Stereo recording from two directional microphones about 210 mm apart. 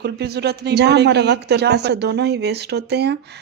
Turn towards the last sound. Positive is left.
turn(degrees=-50)  # may be behind; listen again after turning